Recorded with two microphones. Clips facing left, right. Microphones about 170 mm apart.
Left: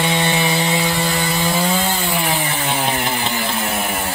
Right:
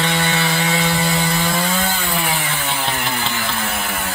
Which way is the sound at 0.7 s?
5° left (ahead or behind).